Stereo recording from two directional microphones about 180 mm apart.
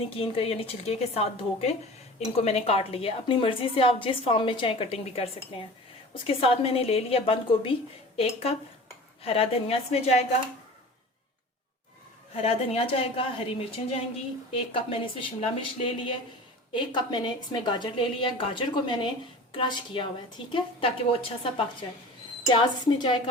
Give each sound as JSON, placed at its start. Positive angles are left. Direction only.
{"t": 0.2, "sound": "a woman's voice", "side_deg": 30}
{"t": 12.4, "sound": "a woman's voice", "side_deg": 35}
{"t": 22.4, "sound": "a woman's voice", "side_deg": 25}